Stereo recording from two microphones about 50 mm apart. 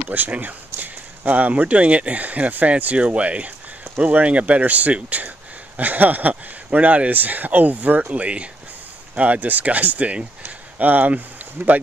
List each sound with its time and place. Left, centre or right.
0.1 s speech: right